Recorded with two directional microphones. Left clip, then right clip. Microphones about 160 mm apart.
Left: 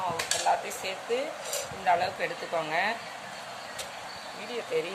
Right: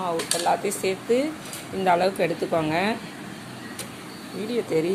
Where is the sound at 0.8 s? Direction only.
35° right (ahead or behind).